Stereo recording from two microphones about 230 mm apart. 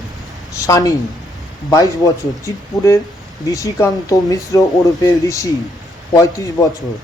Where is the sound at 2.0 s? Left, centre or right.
Centre.